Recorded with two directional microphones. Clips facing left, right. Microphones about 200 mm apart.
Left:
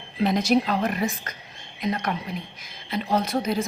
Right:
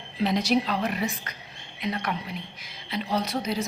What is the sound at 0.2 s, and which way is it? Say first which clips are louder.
A woman's voice: left 3 dB; 50° left (ahead or behind).